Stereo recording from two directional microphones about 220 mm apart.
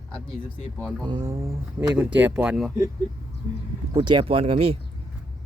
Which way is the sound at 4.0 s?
20° right (ahead or behind).